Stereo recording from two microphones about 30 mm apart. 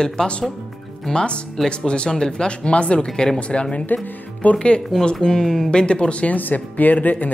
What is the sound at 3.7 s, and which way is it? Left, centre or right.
Speech, left.